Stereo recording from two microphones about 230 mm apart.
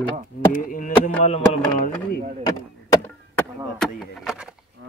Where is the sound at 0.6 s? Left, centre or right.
Left.